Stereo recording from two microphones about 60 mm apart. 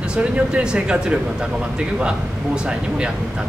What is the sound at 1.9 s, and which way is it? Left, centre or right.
Speech, centre.